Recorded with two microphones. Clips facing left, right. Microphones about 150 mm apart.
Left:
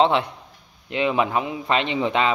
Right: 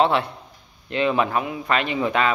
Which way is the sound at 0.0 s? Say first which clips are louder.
Left 1 dB; 20° left (ahead or behind).